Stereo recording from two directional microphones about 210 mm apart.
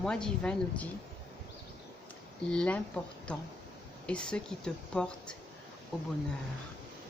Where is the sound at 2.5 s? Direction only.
5° left (ahead or behind).